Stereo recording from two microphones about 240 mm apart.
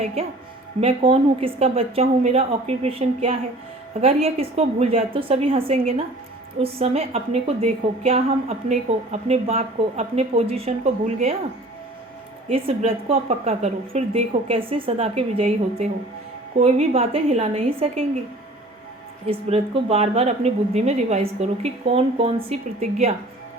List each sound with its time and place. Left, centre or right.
0.0 s a woman's voice: right
12.5 s a woman's voice: right
19.3 s a woman's voice: right